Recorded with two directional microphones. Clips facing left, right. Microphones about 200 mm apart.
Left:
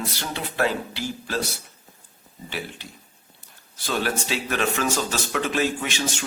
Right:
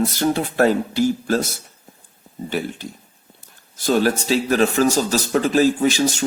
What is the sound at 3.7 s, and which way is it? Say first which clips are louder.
Speech: right 8 dB; 40° right (ahead or behind).